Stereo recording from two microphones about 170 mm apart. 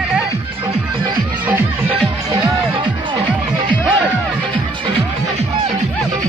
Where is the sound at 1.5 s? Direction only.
10° right (ahead or behind).